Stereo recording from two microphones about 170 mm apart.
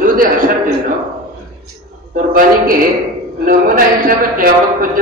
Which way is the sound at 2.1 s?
55° right (ahead or behind).